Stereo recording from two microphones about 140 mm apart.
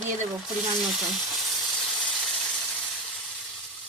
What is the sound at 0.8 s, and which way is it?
Frying, centre (ahead or behind).